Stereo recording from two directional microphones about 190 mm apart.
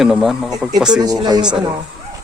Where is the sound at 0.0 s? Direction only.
Centre (ahead or behind).